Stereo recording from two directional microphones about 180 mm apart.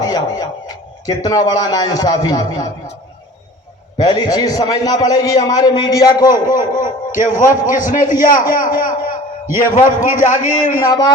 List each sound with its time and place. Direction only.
0.0 s a sound: 20° left (ahead or behind)
1.0 s a man's voice: 20° left (ahead or behind)
3.9 s a man's voice: 25° left (ahead or behind)
6.3 s a man's voice: 50° left (ahead or behind)
9.5 s a man's voice: 15° right (ahead or behind)
9.7 s a man's voice: 45° left (ahead or behind)